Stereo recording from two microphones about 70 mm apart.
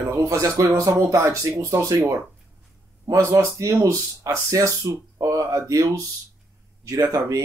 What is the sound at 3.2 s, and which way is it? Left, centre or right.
Speech, right.